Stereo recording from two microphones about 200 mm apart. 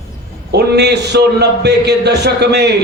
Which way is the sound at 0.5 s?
55° right (ahead or behind).